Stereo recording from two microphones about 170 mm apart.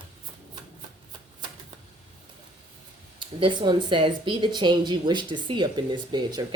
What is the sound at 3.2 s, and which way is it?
Speech, 30° right (ahead or behind).